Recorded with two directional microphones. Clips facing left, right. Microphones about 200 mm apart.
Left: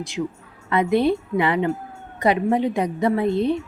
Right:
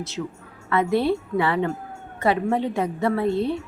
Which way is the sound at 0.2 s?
20° left (ahead or behind).